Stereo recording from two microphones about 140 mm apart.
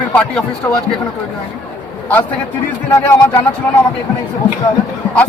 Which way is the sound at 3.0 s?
15° left (ahead or behind).